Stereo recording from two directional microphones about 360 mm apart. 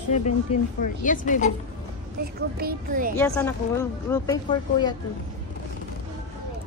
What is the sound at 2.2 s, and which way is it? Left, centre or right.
Speech, right.